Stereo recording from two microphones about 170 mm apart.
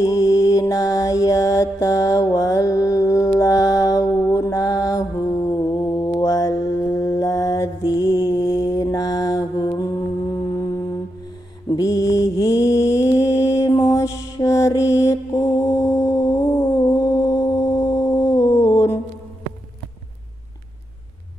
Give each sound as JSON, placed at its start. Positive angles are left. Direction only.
{"t": 0.0, "sound": "mantra", "side_deg": 20}
{"t": 11.7, "sound": "mantra", "side_deg": 20}